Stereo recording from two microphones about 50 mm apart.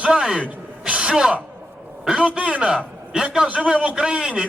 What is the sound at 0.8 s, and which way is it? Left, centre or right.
Speech, right.